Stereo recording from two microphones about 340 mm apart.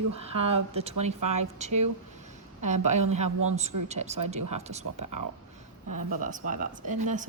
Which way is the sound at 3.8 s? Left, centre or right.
Centre.